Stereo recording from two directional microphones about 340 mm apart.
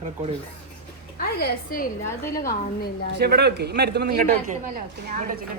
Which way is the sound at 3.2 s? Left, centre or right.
Right.